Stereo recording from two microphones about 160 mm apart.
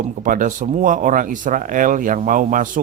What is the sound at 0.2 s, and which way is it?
A man's voice, 55° right (ahead or behind).